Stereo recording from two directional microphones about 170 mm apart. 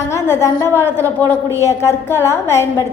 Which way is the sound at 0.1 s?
15° left (ahead or behind).